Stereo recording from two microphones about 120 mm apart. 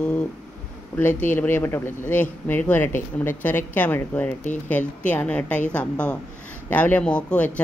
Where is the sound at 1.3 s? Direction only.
15° left (ahead or behind).